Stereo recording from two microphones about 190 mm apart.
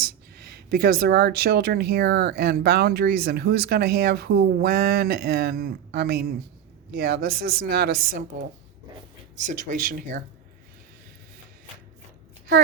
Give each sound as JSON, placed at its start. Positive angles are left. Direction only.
{"t": 0.0, "sound": "speech", "side_deg": -55}
{"t": 9.4, "sound": "speech", "side_deg": -40}